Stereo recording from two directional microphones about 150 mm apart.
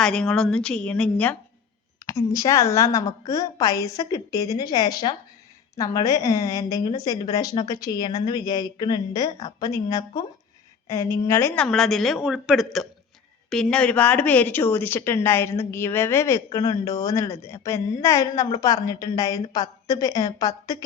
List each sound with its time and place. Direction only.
0.0 s a woman's voice: 5° left (ahead or behind)
2.0 s a woman's voice: 20° left (ahead or behind)
11.6 s a woman's voice: 5° left (ahead or behind); by 20.8 s 25° left (ahead or behind)